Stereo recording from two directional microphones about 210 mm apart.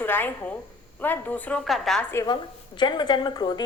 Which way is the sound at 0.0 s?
10° left (ahead or behind).